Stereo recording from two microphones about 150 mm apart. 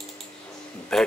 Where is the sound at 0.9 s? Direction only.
5° left (ahead or behind).